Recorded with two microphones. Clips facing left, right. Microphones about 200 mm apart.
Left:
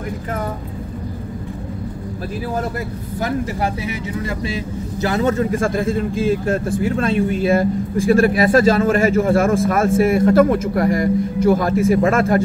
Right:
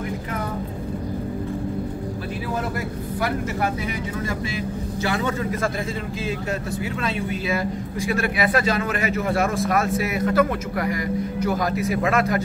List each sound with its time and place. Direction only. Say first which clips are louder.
5.0 s a man's voice: left 7 dB; 40° left (ahead or behind)
8.2 s a man's voice: left 7 dB; 40° left (ahead or behind)